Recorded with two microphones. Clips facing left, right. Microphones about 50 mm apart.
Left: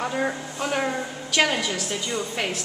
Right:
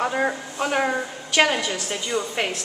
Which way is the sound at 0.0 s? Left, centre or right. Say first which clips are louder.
Right 3 dB; centre.